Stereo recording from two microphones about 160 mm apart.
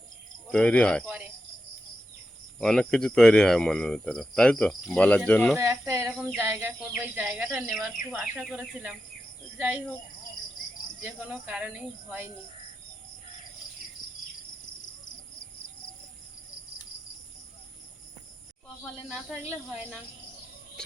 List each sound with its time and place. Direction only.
0.5 s cricket: 5° left (ahead or behind)
2.6 s cricket: 5° left (ahead or behind)
5.5 s speech: 15° right (ahead or behind)
8.1 s cricket: centre (ahead or behind)
9.6 s speech: 10° right (ahead or behind)
11.0 s speech: 10° right (ahead or behind)